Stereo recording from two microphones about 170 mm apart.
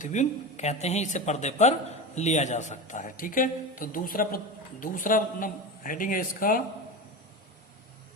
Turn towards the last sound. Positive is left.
turn(degrees=55)  # may be behind; listen again after turning